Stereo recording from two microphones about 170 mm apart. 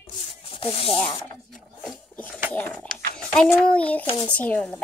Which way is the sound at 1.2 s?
Centre (ahead or behind).